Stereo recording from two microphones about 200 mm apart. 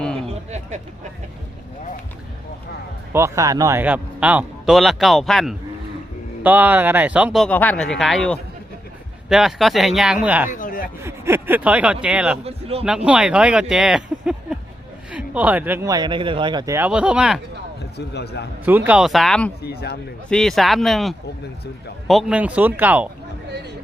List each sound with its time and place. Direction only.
3.1 s a man's voice: 15° right (ahead or behind)
7.4 s speech: 10° left (ahead or behind)
10.5 s speech: 40° left (ahead or behind)
11.0 s a man's voice: 10° right (ahead or behind)
12.5 s speech: 30° right (ahead or behind)
13.1 s a man's voice: 5° right (ahead or behind)
17.9 s a man's voice: 55° left (ahead or behind)
18.6 s speech: 10° right (ahead or behind)
19.6 s a man's voice: 55° left (ahead or behind)
20.3 s a man's voice: centre (ahead or behind)